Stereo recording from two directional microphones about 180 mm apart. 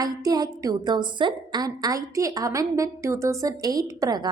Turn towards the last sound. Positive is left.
turn(degrees=-20)  # may be behind; listen again after turning